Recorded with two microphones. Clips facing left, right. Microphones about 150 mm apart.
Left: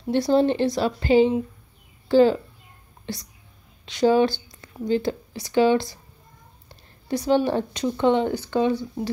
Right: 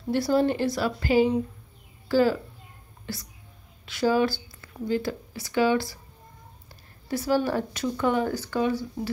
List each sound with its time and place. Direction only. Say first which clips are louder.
0.1 s a child's voice: left 3 dB; 25° left (ahead or behind)